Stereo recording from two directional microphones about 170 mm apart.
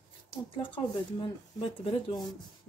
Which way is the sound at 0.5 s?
30° left (ahead or behind).